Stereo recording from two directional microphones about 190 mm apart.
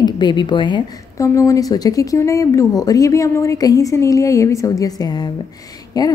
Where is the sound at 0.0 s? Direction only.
25° left (ahead or behind).